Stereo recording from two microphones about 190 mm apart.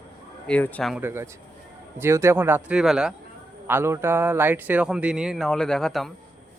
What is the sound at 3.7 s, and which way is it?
Speech, 15° right (ahead or behind).